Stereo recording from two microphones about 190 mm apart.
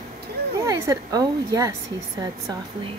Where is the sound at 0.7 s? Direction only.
15° right (ahead or behind).